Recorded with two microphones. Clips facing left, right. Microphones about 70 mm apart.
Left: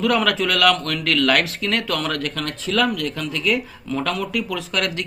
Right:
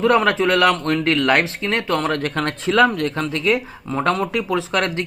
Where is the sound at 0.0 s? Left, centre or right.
Right.